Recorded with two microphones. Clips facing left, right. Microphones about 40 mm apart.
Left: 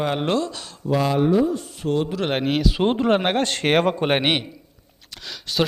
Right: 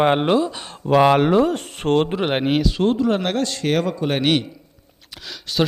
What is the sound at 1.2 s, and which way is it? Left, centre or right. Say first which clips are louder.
Speech: right 2 dB; right.